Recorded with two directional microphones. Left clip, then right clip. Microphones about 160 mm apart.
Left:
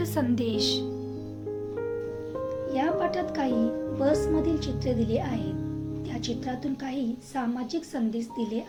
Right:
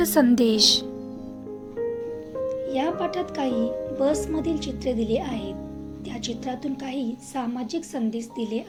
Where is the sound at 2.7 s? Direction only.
35° right (ahead or behind).